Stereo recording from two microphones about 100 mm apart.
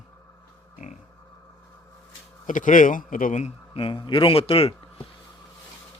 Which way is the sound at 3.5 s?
65° left (ahead or behind).